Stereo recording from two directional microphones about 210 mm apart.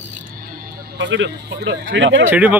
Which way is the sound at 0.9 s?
60° right (ahead or behind).